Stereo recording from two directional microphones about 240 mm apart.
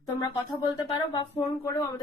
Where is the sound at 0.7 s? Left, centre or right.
Centre.